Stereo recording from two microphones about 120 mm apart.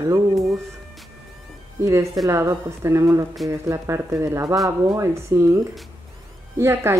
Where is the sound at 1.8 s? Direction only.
25° right (ahead or behind).